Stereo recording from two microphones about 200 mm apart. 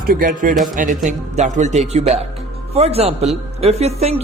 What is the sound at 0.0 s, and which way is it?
A man's voice, 45° right (ahead or behind).